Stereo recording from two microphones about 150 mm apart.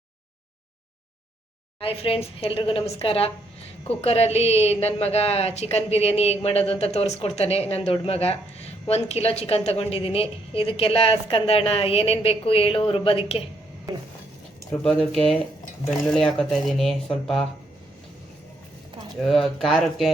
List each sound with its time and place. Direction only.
1.8 s a woman's voice: 40° left (ahead or behind)
14.8 s speech: centre (ahead or behind)
19.2 s speech: centre (ahead or behind)